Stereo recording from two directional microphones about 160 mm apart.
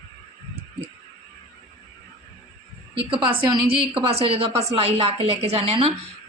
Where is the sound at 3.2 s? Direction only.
30° right (ahead or behind).